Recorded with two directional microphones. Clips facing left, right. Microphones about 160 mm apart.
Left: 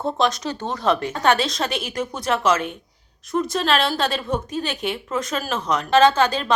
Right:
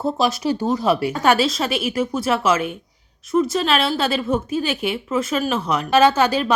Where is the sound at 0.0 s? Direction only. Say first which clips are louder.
Right 2 dB; 5° right (ahead or behind).